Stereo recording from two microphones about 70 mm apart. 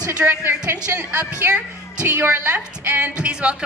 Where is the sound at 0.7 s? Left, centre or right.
Right.